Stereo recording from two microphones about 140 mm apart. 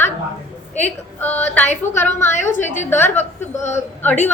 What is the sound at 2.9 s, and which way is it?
A woman's voice, 15° left (ahead or behind).